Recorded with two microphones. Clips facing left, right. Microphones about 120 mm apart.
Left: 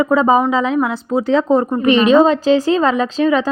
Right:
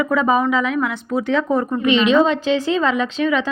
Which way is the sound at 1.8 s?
40° left (ahead or behind).